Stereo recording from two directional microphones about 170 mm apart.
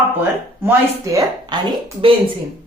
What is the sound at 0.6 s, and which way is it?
Speech, 20° right (ahead or behind).